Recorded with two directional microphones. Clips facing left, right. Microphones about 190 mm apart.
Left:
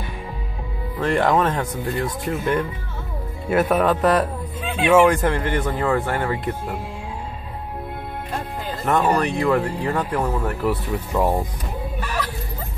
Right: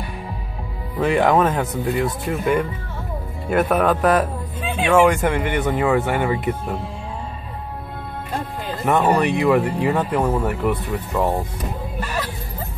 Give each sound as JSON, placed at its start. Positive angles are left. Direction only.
{"t": 0.9, "sound": "speech", "side_deg": -5}
{"t": 8.8, "sound": "speech", "side_deg": -10}
{"t": 10.4, "sound": "speech", "side_deg": 0}